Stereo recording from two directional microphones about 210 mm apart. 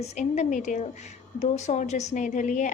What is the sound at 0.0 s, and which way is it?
A woman's voice, 35° left (ahead or behind).